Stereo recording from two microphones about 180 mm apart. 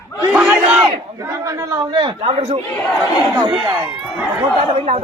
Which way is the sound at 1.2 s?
15° right (ahead or behind).